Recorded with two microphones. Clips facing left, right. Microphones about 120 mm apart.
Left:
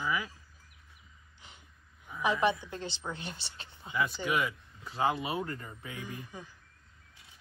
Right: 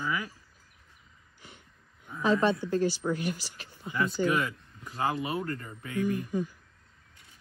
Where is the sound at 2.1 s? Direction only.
15° left (ahead or behind).